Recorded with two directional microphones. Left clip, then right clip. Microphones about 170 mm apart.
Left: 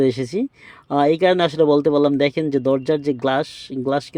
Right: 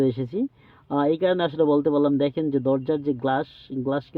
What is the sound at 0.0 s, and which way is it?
Speech, 15° left (ahead or behind).